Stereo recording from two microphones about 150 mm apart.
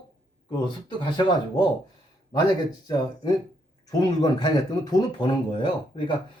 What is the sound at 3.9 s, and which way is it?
A man's voice, 25° left (ahead or behind).